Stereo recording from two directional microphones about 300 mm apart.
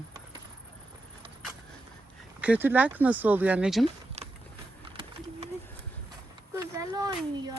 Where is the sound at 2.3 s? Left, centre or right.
Centre.